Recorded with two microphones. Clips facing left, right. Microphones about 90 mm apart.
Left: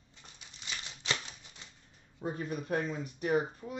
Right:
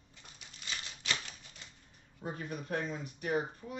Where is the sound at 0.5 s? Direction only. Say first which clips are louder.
Even; 25° left (ahead or behind).